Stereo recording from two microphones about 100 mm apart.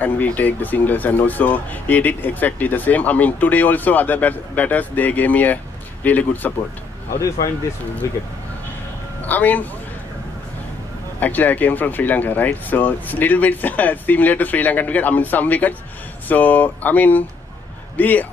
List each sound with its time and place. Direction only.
0.0 s speech: 15° left (ahead or behind)
9.2 s speech: 15° left (ahead or behind)
11.1 s speech: 15° left (ahead or behind)